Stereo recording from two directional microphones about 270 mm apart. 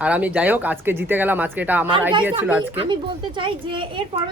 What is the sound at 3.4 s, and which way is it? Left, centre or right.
Speech, centre.